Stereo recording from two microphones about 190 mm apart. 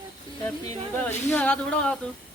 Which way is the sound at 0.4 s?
10° left (ahead or behind).